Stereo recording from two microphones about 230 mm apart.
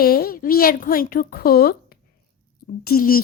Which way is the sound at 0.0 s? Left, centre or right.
Left.